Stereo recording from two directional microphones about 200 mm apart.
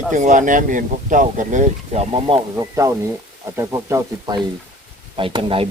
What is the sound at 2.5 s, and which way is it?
Speech, 15° right (ahead or behind).